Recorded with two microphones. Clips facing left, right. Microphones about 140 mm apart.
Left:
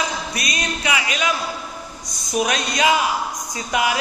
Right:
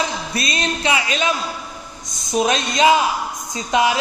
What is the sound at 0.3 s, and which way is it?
Speech, 30° right (ahead or behind).